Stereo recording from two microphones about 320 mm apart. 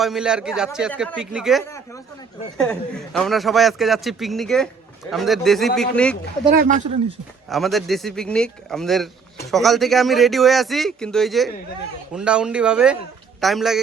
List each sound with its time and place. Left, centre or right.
0.0 s a man's voice: centre
6.5 s speech: right
7.5 s a man's voice: centre